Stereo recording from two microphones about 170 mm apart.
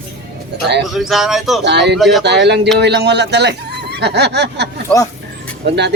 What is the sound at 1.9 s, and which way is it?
Speech, centre (ahead or behind).